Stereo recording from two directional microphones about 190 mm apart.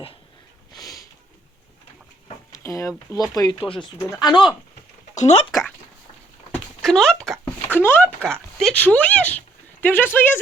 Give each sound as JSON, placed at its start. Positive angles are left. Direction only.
{"t": 0.7, "sound": "sniff", "side_deg": 20}
{"t": 2.2, "sound": "speech", "side_deg": 15}
{"t": 5.1, "sound": "speech", "side_deg": 35}
{"t": 6.5, "sound": "a sound", "side_deg": 0}
{"t": 7.8, "sound": "speech", "side_deg": 10}